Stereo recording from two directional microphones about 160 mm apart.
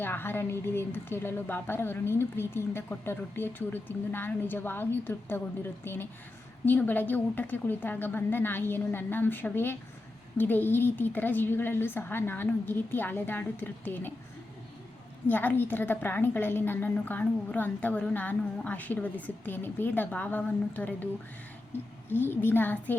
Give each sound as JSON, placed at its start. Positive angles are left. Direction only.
{"t": 0.0, "sound": "a woman's voice", "side_deg": 15}
{"t": 15.3, "sound": "a woman's voice", "side_deg": 10}
{"t": 22.3, "sound": "a woman's voice", "side_deg": 10}